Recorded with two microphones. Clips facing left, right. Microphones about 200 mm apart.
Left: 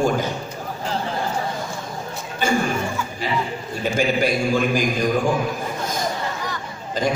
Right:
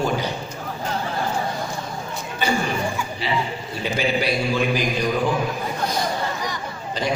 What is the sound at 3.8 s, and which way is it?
Mantra, 45° left (ahead or behind).